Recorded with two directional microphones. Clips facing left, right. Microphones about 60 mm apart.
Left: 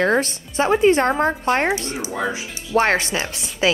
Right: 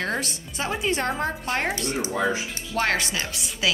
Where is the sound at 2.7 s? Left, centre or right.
Left.